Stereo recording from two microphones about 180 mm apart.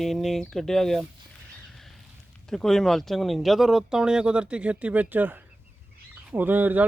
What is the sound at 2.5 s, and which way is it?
Speech, centre (ahead or behind).